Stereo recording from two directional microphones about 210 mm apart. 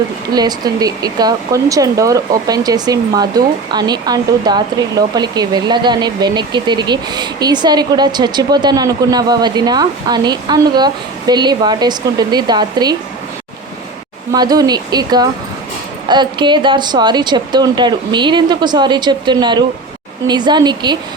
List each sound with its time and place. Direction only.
0.3 s speech: 20° right (ahead or behind)
14.3 s speech: 20° right (ahead or behind)